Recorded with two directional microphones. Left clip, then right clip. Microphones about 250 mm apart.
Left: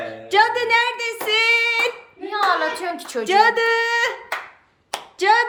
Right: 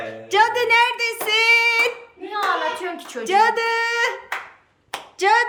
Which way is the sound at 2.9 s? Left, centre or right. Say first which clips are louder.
Left 4 dB; left.